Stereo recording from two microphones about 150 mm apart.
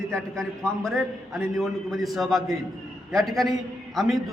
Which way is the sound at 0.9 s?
Centre (ahead or behind).